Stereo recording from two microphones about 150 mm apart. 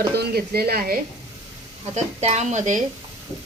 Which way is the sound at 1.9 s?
50° right (ahead or behind).